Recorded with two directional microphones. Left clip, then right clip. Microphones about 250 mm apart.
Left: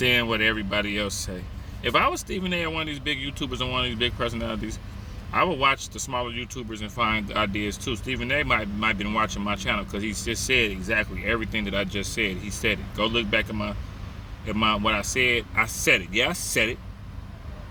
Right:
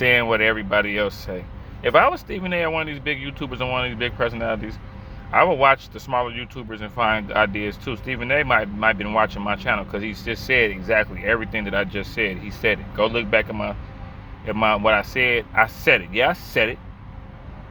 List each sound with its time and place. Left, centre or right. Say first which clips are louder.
0.0 s speech: right 4 dB; centre